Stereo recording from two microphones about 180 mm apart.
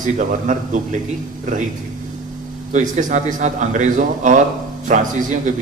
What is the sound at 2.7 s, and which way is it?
A man's voice, 45° right (ahead or behind).